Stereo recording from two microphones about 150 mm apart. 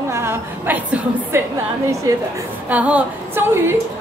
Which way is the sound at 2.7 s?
10° right (ahead or behind).